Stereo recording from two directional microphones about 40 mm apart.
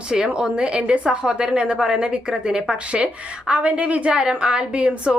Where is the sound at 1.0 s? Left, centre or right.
Right.